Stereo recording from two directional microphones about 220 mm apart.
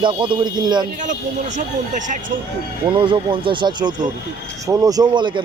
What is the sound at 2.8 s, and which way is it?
A man's voice, 20° right (ahead or behind).